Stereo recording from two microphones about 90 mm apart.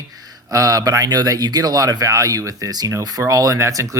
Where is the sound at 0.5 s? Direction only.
40° right (ahead or behind).